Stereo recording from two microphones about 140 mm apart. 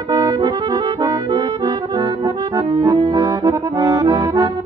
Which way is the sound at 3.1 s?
25° right (ahead or behind).